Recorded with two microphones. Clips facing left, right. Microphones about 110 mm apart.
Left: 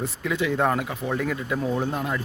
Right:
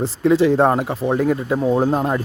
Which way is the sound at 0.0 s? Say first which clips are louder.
Right 11 dB; 30° right (ahead or behind).